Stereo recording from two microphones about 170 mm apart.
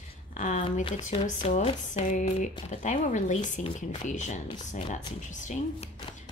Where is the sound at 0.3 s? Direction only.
45° left (ahead or behind).